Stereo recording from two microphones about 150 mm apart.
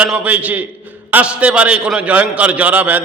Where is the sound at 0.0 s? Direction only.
10° right (ahead or behind).